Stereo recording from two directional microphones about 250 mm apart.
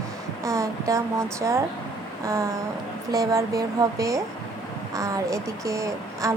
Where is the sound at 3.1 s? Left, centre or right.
Centre.